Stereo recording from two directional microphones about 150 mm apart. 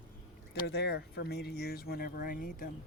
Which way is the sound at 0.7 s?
90° left.